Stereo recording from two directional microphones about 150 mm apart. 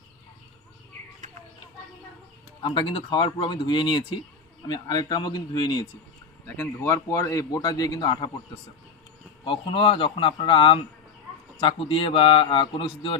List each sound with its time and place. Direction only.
2.6 s a man's voice: 30° left (ahead or behind)
6.6 s a man's voice: 20° left (ahead or behind)
9.4 s speech: 35° left (ahead or behind)